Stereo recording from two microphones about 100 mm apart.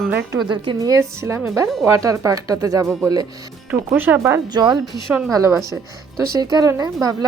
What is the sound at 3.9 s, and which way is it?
Speech, 20° right (ahead or behind).